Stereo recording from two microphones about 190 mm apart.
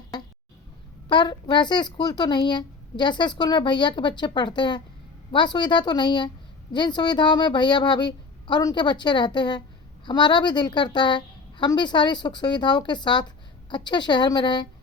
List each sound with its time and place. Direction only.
1.0 s speech: 25° left (ahead or behind)